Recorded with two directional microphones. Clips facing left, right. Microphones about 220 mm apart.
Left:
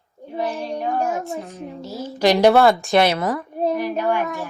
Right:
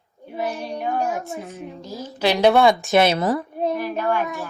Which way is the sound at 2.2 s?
10° left (ahead or behind).